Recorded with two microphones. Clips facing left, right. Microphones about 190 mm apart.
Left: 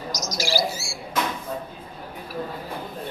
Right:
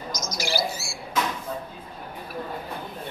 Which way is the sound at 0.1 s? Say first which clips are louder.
Left 2 dB; 55° right (ahead or behind).